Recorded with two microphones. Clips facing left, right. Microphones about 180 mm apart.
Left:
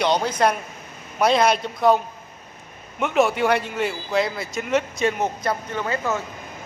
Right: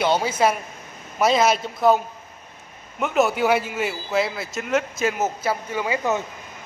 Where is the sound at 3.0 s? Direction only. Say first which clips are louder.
Even; centre (ahead or behind); by 6.3 s 20° right (ahead or behind).